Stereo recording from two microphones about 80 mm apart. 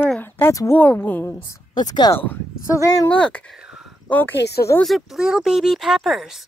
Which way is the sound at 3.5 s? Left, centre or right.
Centre.